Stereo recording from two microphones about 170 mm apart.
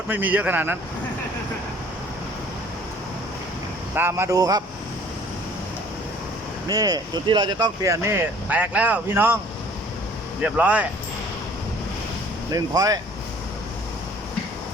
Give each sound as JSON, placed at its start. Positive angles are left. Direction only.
{"t": 0.1, "sound": "speech", "side_deg": -10}
{"t": 3.9, "sound": "speech", "side_deg": -15}
{"t": 6.7, "sound": "speech", "side_deg": -25}
{"t": 10.4, "sound": "speech", "side_deg": -10}
{"t": 12.5, "sound": "speech", "side_deg": -20}